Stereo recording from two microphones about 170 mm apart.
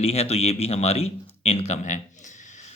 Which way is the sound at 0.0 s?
35° left (ahead or behind).